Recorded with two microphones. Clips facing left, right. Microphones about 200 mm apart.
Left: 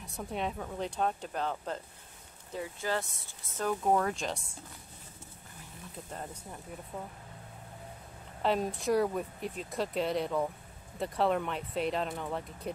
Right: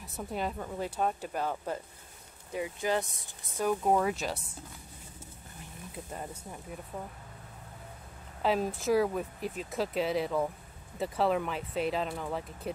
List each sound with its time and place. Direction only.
0.0 s speech: centre (ahead or behind)
8.4 s speech: centre (ahead or behind)